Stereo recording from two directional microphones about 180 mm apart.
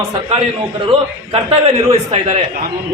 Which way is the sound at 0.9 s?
35° right (ahead or behind).